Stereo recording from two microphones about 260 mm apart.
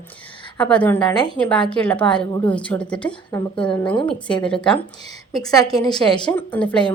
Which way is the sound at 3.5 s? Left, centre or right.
Centre.